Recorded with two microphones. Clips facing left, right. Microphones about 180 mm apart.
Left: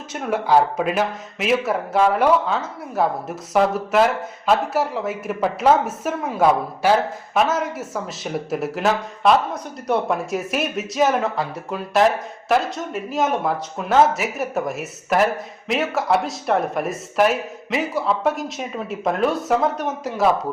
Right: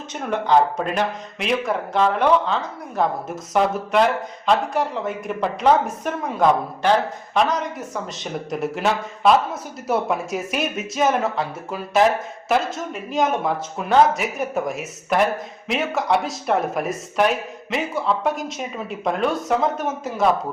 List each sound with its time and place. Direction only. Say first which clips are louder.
0.1 s speech: left 1 dB; 5° left (ahead or behind)